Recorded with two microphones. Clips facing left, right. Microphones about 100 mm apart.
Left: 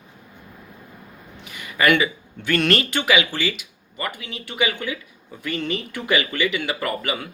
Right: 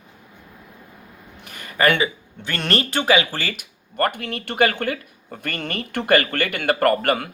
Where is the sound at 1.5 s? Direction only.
45° right (ahead or behind).